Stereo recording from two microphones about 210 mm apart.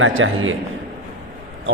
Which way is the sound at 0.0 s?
70° right (ahead or behind).